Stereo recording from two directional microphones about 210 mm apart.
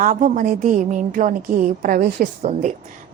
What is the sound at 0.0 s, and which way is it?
A woman's voice, 35° right (ahead or behind).